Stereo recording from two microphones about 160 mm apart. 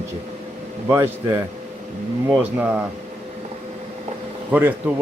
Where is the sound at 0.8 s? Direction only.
15° right (ahead or behind).